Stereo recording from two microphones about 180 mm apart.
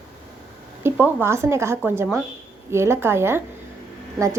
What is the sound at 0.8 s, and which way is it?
Speech, 10° right (ahead or behind).